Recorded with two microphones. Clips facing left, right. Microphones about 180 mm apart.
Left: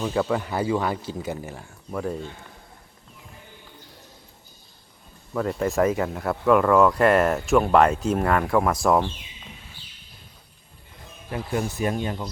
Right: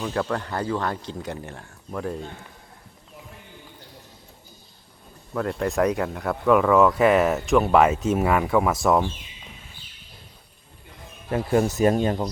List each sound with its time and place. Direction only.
0.0 s speech: 5° left (ahead or behind)
5.3 s speech: centre (ahead or behind)
11.3 s speech: 45° right (ahead or behind)